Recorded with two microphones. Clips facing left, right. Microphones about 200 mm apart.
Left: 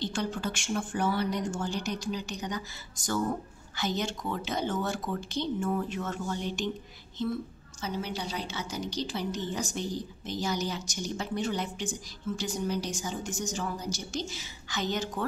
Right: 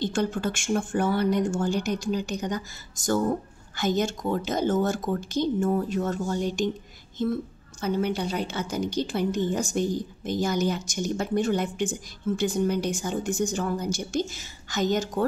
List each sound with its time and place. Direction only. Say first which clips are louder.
0.0 s a woman's voice: right 6 dB; 50° right (ahead or behind)